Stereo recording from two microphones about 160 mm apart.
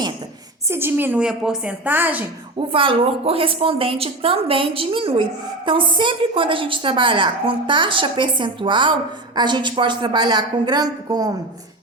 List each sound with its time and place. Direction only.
0.7 s a woman's voice: 15° right (ahead or behind)
2.7 s a woman's voice: 35° right (ahead or behind)